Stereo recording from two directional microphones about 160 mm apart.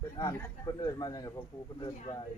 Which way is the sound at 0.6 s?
25° left (ahead or behind).